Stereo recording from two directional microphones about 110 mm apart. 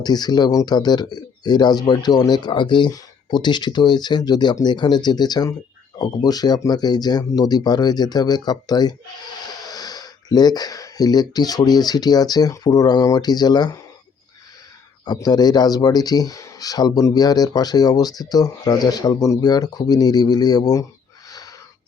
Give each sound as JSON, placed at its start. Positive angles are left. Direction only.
{"t": 0.0, "sound": "speech", "side_deg": 40}
{"t": 15.0, "sound": "speech", "side_deg": 40}
{"t": 21.2, "sound": "a sound", "side_deg": 35}